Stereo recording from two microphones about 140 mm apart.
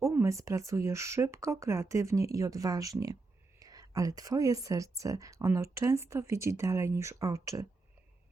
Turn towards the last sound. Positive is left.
turn(degrees=-25)  # may be behind; listen again after turning